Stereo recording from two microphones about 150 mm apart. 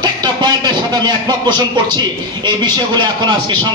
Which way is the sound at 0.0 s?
30° right (ahead or behind).